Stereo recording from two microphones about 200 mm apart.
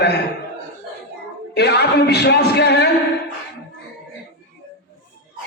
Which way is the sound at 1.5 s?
55° left (ahead or behind).